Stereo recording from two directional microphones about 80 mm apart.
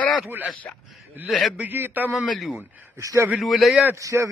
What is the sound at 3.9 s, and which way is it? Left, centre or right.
Speech, right.